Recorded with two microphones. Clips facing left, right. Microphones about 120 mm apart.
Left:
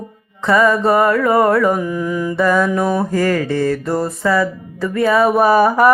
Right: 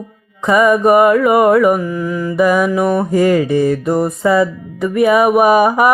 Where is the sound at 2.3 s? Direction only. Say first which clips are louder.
Right 3 dB; 15° right (ahead or behind).